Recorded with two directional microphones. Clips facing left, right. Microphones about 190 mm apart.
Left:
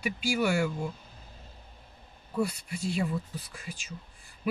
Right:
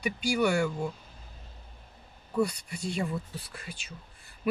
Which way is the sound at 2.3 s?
5° left (ahead or behind).